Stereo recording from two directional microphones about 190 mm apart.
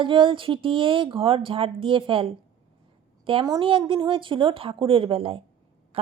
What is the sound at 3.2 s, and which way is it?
A woman's voice, 25° right (ahead or behind).